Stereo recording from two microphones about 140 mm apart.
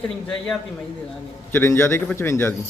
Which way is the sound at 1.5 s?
20° left (ahead or behind).